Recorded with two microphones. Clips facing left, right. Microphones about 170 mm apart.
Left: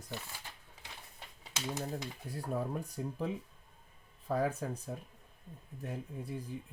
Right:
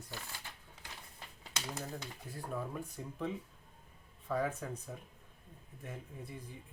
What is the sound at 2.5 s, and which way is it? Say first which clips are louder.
Speech: left 4 dB; 40° left (ahead or behind).